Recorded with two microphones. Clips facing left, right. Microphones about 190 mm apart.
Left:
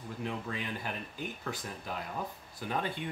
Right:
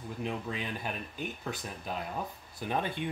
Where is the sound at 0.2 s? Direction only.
20° right (ahead or behind).